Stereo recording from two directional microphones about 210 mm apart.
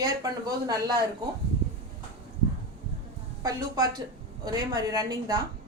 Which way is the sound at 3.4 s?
15° right (ahead or behind).